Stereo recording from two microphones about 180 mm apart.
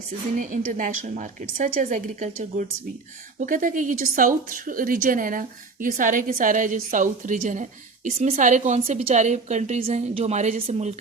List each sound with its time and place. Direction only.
0.3 s a woman's voice: 45° right (ahead or behind)